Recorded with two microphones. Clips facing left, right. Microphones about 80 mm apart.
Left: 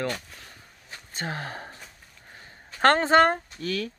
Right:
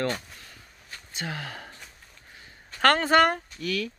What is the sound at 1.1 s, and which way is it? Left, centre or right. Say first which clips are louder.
Speech: left 2 dB; left.